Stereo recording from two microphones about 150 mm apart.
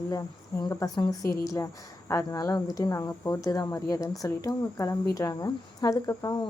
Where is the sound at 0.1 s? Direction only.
20° left (ahead or behind).